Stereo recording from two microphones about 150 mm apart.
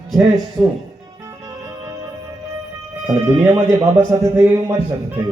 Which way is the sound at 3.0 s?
10° right (ahead or behind).